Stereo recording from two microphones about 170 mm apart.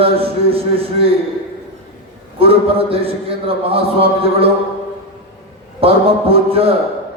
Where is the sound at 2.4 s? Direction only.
35° right (ahead or behind).